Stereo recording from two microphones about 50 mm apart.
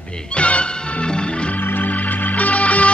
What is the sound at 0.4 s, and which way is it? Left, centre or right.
Music, left.